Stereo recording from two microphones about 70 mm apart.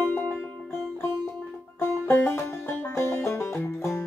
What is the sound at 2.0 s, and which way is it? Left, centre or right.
Banjo, left.